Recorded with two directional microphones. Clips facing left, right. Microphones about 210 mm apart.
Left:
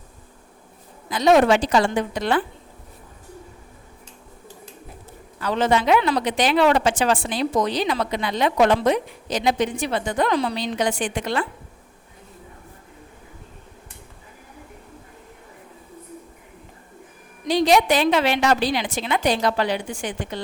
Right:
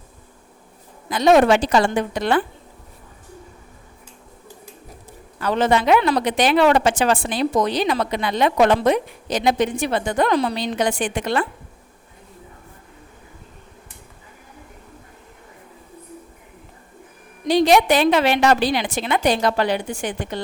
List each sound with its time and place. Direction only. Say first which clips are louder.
1.1 s a woman's voice: right 2 dB; 55° right (ahead or behind)
5.4 s a woman's voice: right 2 dB; 55° right (ahead or behind)
17.5 s a woman's voice: right 2 dB; 55° right (ahead or behind)